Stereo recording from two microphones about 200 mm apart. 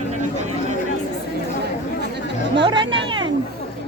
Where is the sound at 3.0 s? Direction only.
25° right (ahead or behind).